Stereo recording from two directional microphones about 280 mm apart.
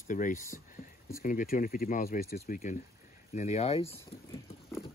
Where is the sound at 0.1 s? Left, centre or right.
Left.